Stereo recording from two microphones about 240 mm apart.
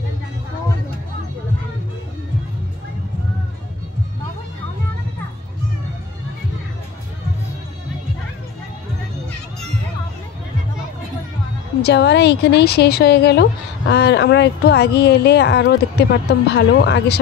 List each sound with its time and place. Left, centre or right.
11.8 s speech: left